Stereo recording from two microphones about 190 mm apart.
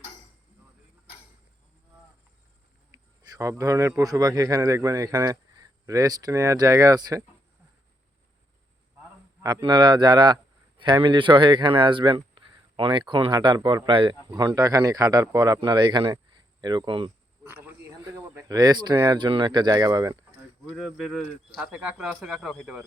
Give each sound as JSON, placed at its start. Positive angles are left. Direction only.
{"t": 2.9, "sound": "speech", "side_deg": -15}
{"t": 9.4, "sound": "a man's voice", "side_deg": -20}
{"t": 17.4, "sound": "a sound", "side_deg": -10}
{"t": 18.3, "sound": "a man's voice", "side_deg": -20}
{"t": 20.7, "sound": "speech", "side_deg": 0}